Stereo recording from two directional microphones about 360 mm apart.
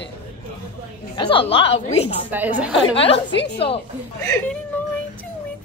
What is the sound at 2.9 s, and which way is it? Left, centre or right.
Speech, centre.